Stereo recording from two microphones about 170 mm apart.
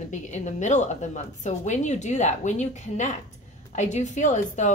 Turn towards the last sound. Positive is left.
turn(degrees=45)  # may be behind; listen again after turning